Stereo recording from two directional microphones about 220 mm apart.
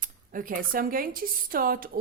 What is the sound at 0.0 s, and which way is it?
Speech, 40° right (ahead or behind).